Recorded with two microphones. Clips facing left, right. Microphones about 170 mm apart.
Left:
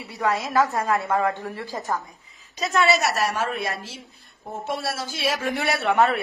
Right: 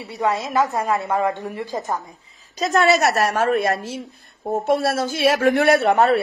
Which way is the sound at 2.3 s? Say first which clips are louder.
Right 4 dB; 35° right (ahead or behind).